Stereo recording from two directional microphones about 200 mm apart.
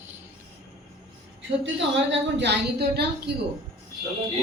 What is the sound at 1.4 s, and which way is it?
A woman's voice, 65° right (ahead or behind).